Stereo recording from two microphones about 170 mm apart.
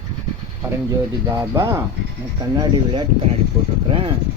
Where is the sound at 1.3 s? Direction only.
15° right (ahead or behind).